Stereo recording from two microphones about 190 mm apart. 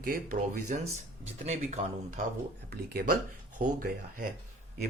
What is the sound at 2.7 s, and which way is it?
Speech, 55° right (ahead or behind).